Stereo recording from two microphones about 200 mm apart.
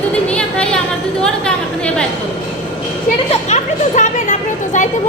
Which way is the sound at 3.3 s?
35° left (ahead or behind).